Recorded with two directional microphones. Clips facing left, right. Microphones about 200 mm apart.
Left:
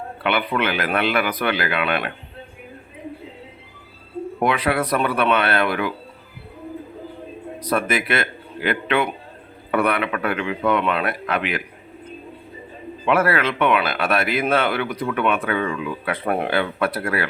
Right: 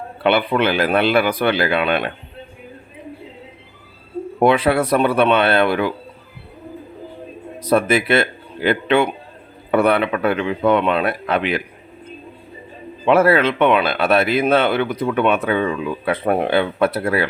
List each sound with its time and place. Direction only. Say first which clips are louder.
0.2 s speech: right 5 dB; 30° right (ahead or behind)
4.4 s speech: right 6 dB; 30° right (ahead or behind)
7.6 s speech: right 6 dB; 25° right (ahead or behind)
13.1 s speech: right 5 dB; 25° right (ahead or behind)